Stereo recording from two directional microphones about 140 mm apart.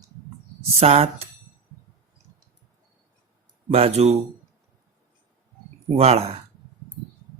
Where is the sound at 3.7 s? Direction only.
45° right (ahead or behind).